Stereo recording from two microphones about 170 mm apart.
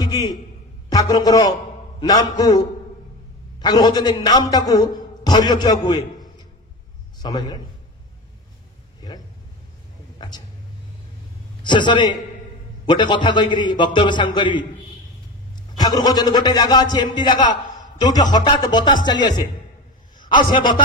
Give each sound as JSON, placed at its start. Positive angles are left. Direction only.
{"t": 0.9, "sound": "a man's voice", "side_deg": 20}
{"t": 7.2, "sound": "a man's voice", "side_deg": 25}
{"t": 11.6, "sound": "a man's voice", "side_deg": 25}
{"t": 20.5, "sound": "a man's voice", "side_deg": 30}